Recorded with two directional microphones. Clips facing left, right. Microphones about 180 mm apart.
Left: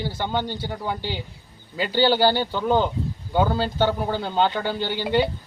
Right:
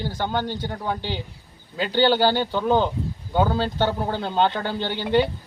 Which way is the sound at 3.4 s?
10° left (ahead or behind).